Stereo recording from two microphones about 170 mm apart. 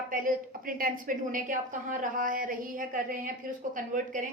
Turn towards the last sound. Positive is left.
turn(degrees=-50)  # may be behind; listen again after turning